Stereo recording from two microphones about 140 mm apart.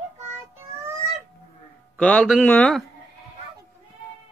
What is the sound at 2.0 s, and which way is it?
Speech, 10° left (ahead or behind).